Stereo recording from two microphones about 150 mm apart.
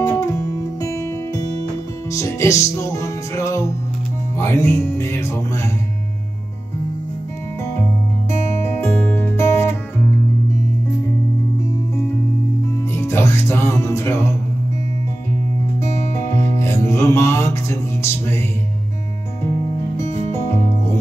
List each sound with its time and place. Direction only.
0.0 s music: 20° left (ahead or behind)
4.4 s speech: 20° left (ahead or behind)
8.3 s music: 15° left (ahead or behind)
12.9 s music: 15° left (ahead or behind)
15.8 s music: 20° left (ahead or behind)
20.0 s music: 15° left (ahead or behind)